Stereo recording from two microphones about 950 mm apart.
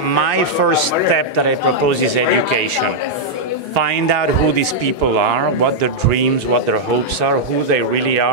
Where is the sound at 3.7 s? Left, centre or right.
Right.